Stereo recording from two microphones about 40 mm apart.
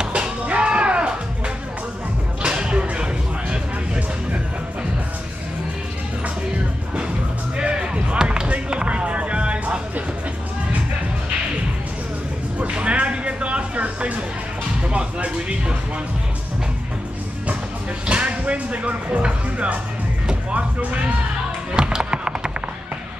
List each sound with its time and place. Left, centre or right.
0.0 s music: right
2.4 s music: right
7.5 s music: right
12.5 s music: right
18.0 s music: right
21.7 s music: right